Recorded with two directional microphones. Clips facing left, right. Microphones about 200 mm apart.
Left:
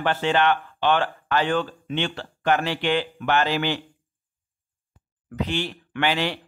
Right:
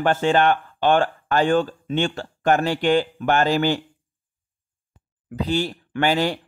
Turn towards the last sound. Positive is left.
turn(degrees=-45)  # may be behind; listen again after turning